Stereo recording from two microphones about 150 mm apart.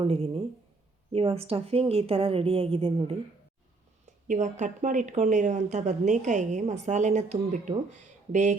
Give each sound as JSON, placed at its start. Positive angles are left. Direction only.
{"t": 0.0, "sound": "a woman's voice", "side_deg": -40}
{"t": 4.0, "sound": "speech", "side_deg": -55}